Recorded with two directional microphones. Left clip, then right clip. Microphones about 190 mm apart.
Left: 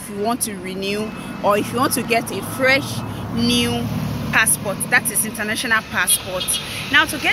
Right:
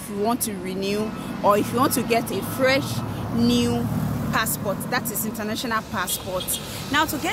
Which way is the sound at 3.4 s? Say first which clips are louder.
Left 3 dB; 15° right (ahead or behind).